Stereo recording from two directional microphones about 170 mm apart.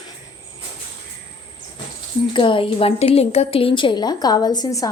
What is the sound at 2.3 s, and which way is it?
A woman's voice, 30° left (ahead or behind).